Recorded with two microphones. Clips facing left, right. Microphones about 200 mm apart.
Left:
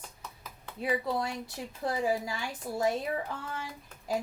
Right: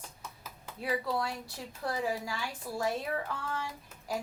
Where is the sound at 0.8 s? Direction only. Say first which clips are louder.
Left 2 dB; 20° left (ahead or behind).